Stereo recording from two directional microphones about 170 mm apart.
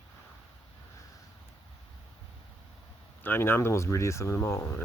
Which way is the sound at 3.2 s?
10° left (ahead or behind).